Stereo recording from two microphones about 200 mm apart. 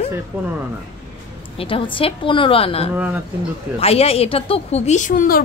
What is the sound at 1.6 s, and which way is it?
A woman's voice, 25° left (ahead or behind).